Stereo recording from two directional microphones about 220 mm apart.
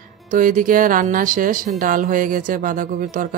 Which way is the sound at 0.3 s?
40° right (ahead or behind).